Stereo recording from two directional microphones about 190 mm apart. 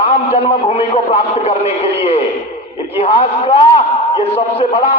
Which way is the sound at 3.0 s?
30° left (ahead or behind).